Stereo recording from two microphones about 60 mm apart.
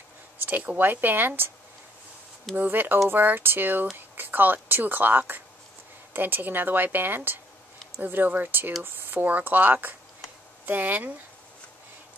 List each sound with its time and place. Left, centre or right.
0.5 s speech: right
2.5 s speech: right